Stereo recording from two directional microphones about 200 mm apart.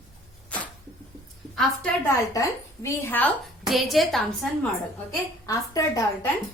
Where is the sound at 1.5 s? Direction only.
5° left (ahead or behind).